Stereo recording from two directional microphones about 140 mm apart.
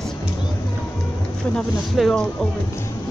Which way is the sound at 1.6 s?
5° left (ahead or behind).